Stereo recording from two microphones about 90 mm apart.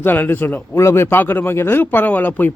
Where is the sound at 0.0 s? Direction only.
25° left (ahead or behind).